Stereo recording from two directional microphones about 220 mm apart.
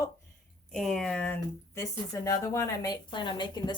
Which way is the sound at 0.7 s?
Centre (ahead or behind).